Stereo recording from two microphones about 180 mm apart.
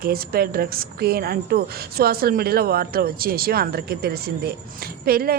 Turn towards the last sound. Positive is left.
turn(degrees=-55)  # may be behind; listen again after turning